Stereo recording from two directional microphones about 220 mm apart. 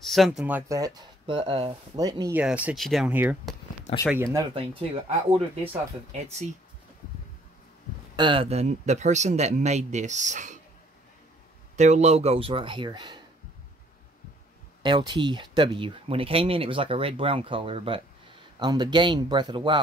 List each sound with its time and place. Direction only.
0.0 s speech: centre (ahead or behind)
5.3 s speech: 25° right (ahead or behind)
8.2 s speech: 25° right (ahead or behind)
11.7 s speech: 30° right (ahead or behind)
14.8 s speech: 20° right (ahead or behind)